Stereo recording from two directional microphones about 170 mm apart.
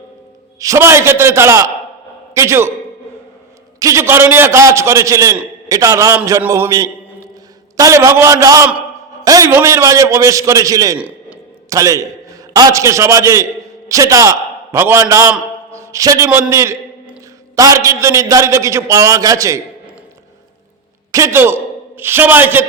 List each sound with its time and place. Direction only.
0.6 s a man's voice: 15° right (ahead or behind)
3.8 s a man's voice: 20° right (ahead or behind)
10.9 s a sound: 10° right (ahead or behind)
11.7 s a man's voice: 20° right (ahead or behind)
21.1 s a man's voice: 15° right (ahead or behind)